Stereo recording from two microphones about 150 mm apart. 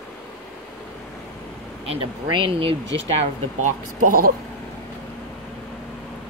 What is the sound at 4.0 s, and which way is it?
Speech, 75° right (ahead or behind).